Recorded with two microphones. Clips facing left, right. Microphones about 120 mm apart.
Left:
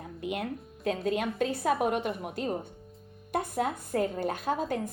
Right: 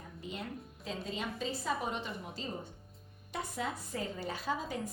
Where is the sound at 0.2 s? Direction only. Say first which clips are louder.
Left 9 dB; 65° left (ahead or behind).